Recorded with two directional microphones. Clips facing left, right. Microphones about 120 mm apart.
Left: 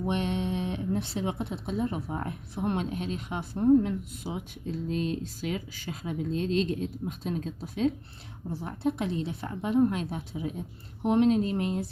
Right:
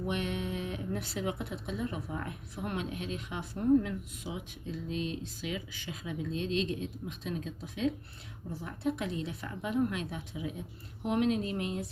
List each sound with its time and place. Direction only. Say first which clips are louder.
0.0 s speech: left 5 dB; 30° left (ahead or behind)